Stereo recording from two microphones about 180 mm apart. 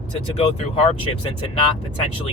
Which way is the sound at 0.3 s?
30° left (ahead or behind).